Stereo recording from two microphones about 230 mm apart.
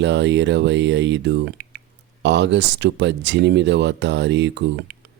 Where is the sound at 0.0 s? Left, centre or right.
Right.